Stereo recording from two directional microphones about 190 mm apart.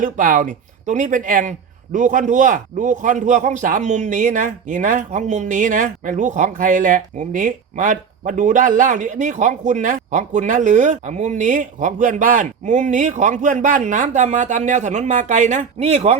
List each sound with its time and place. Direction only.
0.0 s speech: 45° right (ahead or behind)